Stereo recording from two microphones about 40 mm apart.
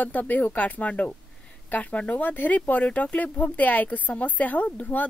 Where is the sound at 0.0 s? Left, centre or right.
Left.